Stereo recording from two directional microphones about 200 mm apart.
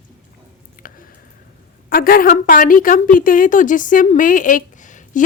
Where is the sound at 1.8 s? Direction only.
45° left (ahead or behind).